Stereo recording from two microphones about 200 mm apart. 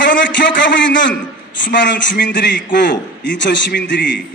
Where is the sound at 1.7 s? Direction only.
60° left (ahead or behind).